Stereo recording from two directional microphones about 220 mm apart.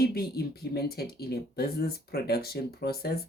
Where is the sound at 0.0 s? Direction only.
45° left (ahead or behind).